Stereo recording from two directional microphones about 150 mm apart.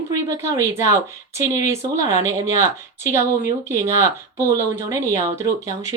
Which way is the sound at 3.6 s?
20° right (ahead or behind).